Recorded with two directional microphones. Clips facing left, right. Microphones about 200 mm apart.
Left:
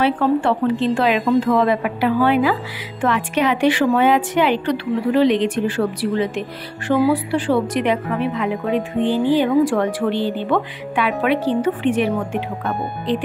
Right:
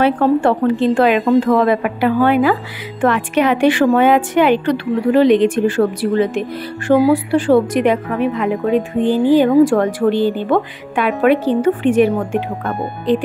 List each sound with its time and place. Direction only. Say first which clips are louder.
0.0 s a woman's voice: right 4 dB; 50° right (ahead or behind)